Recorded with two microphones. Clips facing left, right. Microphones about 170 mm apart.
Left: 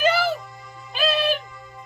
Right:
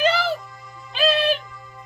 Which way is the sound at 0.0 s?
5° left (ahead or behind).